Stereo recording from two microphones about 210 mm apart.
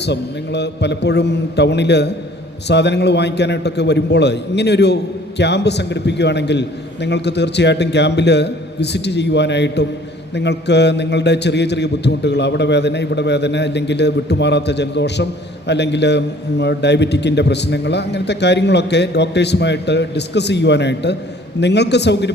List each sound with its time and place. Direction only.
0.0 s a man's voice: 55° left (ahead or behind)